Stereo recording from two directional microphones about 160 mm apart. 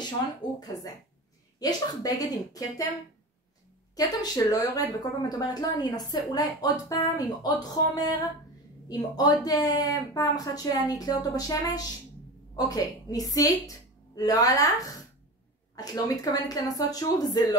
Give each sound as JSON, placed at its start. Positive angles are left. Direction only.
{"t": 0.0, "sound": "speech", "side_deg": 25}
{"t": 3.9, "sound": "a woman's voice", "side_deg": 25}